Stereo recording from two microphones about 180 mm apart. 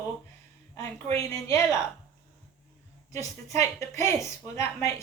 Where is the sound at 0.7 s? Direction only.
15° left (ahead or behind).